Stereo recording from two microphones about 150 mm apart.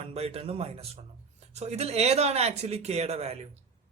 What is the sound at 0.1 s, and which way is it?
Speech, 45° right (ahead or behind).